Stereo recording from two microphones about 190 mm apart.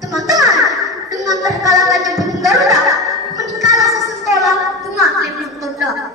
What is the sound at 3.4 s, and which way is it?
Music, 20° right (ahead or behind).